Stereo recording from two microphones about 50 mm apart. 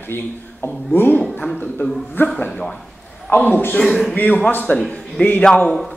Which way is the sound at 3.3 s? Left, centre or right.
Left.